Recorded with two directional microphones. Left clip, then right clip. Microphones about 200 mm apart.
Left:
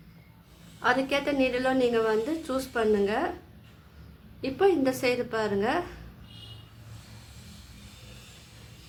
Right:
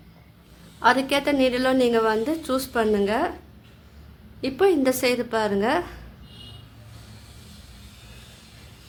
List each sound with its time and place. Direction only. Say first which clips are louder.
0.8 s a woman's voice: right 6 dB; 35° right (ahead or behind)
4.4 s a woman's voice: right 4 dB; 35° right (ahead or behind)